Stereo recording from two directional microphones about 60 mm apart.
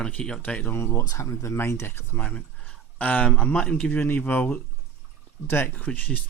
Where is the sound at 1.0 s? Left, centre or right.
Left.